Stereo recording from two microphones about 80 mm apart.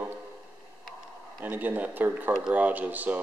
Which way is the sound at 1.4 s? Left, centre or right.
Right.